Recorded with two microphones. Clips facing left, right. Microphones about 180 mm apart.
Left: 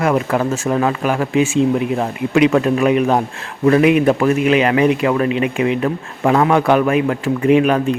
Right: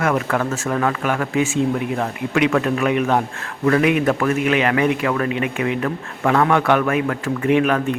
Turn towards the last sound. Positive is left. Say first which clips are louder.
# left 4 dB
turn(degrees=25)  # may be behind; listen again after turning